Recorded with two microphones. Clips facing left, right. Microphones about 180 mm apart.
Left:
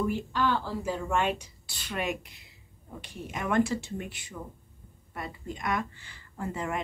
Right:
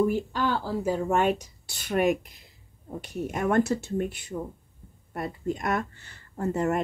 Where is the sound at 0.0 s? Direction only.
45° right (ahead or behind).